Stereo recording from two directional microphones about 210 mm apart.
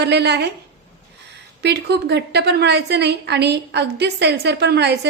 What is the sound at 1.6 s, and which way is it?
A woman's voice, 50° right (ahead or behind).